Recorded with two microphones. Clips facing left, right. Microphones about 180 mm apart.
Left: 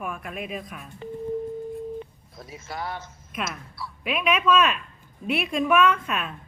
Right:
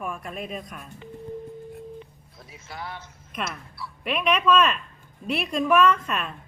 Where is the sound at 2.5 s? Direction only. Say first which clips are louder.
Left 4 dB; 40° left (ahead or behind).